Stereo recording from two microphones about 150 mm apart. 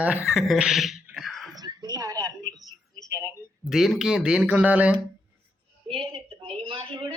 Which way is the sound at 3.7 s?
Centre (ahead or behind).